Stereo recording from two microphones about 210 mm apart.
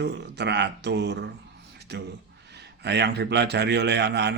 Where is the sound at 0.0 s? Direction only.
55° right (ahead or behind).